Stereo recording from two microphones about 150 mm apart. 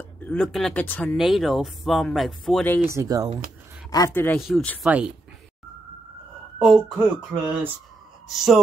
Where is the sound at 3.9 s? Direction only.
20° left (ahead or behind).